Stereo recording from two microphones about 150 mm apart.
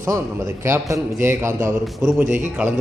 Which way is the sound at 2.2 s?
55° right (ahead or behind).